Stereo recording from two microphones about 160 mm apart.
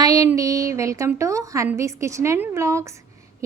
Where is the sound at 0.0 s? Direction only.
20° right (ahead or behind).